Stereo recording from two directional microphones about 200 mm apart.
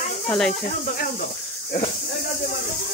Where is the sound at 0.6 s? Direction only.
45° left (ahead or behind).